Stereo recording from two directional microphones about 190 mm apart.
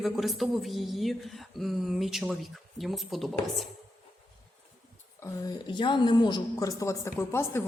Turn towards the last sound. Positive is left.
turn(degrees=15)  # may be behind; listen again after turning